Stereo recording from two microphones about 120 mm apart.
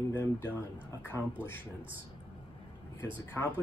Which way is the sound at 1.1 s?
25° right (ahead or behind).